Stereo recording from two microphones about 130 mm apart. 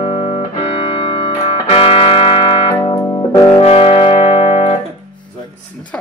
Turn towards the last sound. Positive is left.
turn(degrees=45)  # may be behind; listen again after turning